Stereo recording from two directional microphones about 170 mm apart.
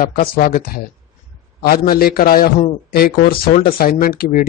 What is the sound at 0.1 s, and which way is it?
Speech, 60° left (ahead or behind).